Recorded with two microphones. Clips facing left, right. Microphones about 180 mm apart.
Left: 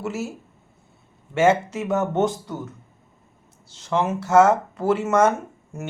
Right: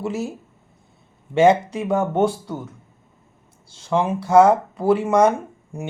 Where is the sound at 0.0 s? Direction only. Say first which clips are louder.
Right 3 dB; 15° right (ahead or behind).